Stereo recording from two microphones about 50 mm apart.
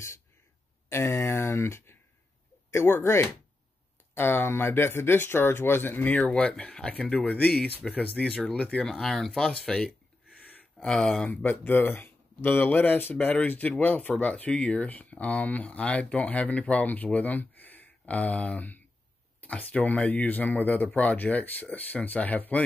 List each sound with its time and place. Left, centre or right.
0.8 s speech: left
6.6 s speech: left
8.2 s speech: centre
11.2 s speech: left